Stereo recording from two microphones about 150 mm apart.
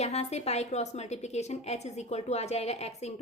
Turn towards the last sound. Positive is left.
turn(degrees=45)  # may be behind; listen again after turning